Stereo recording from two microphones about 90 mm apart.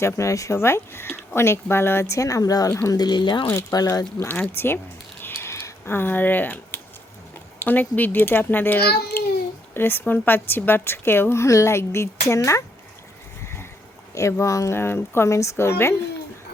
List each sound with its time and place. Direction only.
0.0 s speech: 35° left (ahead or behind)
2.6 s a woman's voice: 30° left (ahead or behind)
2.9 s speech: 50° left (ahead or behind)
3.5 s speech: 35° left (ahead or behind)
3.8 s speech: 45° left (ahead or behind)
4.2 s a woman's voice: 25° left (ahead or behind)
5.2 s a sound: 30° left (ahead or behind)
7.6 s a woman's voice: 20° left (ahead or behind); by 12.6 s 35° left (ahead or behind)
14.2 s a woman's voice: 35° left (ahead or behind)